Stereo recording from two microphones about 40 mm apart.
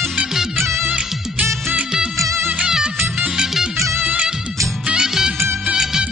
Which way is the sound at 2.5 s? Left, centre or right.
Centre.